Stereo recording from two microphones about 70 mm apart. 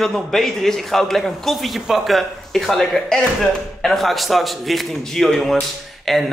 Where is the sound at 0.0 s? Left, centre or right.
Centre.